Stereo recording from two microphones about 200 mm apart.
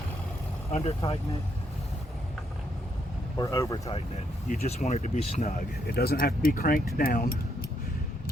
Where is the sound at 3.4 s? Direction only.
15° left (ahead or behind).